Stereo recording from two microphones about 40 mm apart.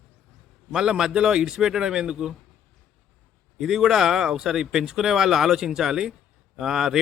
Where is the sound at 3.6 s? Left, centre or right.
Centre.